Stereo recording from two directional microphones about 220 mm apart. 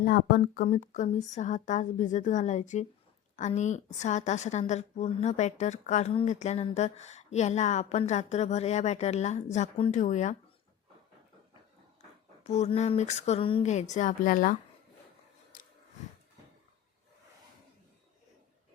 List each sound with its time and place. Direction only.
0.0 s a woman's voice: 40° left (ahead or behind)
12.5 s a woman's voice: 30° left (ahead or behind)